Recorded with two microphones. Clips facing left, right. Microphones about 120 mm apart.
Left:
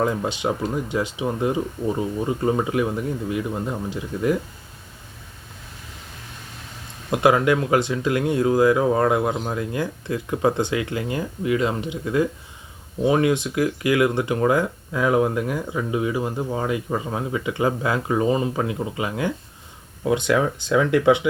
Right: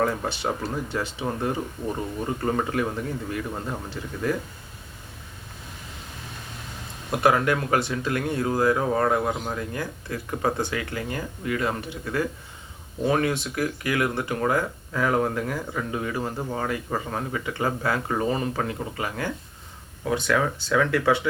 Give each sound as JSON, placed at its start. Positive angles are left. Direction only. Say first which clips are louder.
{"t": 0.0, "sound": "speech", "louder": "left 3 dB", "side_deg": 15}
{"t": 7.1, "sound": "speech", "louder": "left 4 dB", "side_deg": 20}